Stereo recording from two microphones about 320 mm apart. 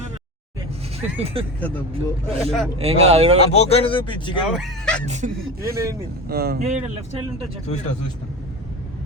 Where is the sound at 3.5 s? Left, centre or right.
Centre.